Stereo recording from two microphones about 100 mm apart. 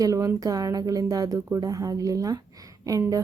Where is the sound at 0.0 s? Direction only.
35° right (ahead or behind).